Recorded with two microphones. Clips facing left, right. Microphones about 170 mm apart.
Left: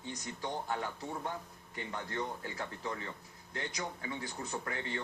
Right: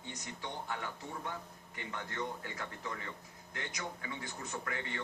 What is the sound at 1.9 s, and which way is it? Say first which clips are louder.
A man's voice: left 1 dB; 30° left (ahead or behind).